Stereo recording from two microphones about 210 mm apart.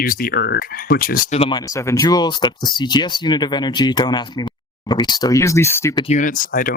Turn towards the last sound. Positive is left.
turn(degrees=40)  # may be behind; listen again after turning